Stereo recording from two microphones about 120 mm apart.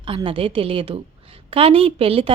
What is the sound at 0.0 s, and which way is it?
A woman's voice, 45° right (ahead or behind).